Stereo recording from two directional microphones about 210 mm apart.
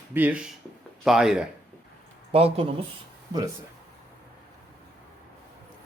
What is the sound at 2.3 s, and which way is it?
Speech, 30° right (ahead or behind).